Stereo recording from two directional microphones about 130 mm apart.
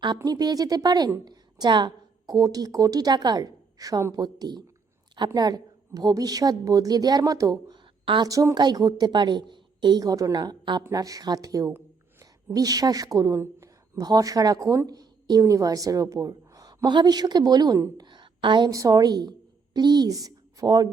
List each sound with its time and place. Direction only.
0.3 s a woman's voice: 30° right (ahead or behind)
8.0 s a woman's voice: 40° right (ahead or behind)
8.3 s a woman's voice: 25° right (ahead or behind)